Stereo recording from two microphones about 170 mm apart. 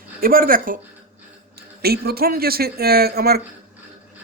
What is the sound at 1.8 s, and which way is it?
Speech, 65° right (ahead or behind).